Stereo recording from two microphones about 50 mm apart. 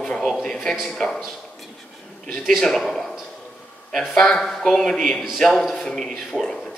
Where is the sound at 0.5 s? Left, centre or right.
Centre.